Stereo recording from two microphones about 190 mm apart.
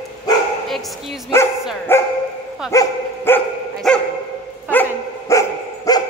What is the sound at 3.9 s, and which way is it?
Dog, 5° left (ahead or behind).